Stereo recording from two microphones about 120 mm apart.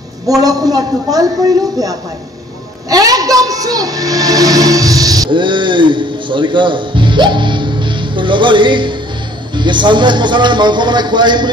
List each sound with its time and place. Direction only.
0.4 s speech: 30° right (ahead or behind)
2.9 s music: 30° right (ahead or behind)
5.3 s speech: 40° right (ahead or behind)